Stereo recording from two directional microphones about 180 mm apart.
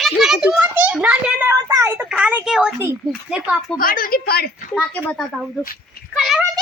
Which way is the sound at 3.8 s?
55° left (ahead or behind).